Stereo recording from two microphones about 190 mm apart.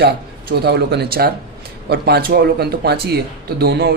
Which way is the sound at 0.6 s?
60° right (ahead or behind).